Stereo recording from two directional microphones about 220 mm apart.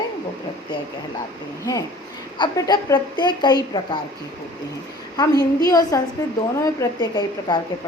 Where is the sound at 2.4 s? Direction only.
20° left (ahead or behind).